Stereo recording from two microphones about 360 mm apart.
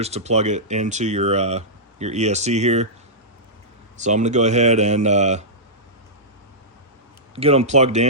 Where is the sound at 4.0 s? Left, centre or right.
Centre.